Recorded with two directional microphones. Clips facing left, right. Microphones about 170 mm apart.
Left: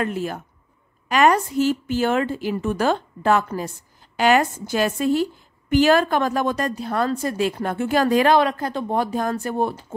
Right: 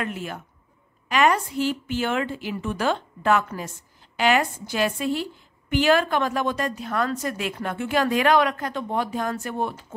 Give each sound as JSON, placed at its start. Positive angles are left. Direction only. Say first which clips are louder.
{"t": 0.0, "sound": "a woman's voice", "louder": "left 6 dB", "side_deg": 35}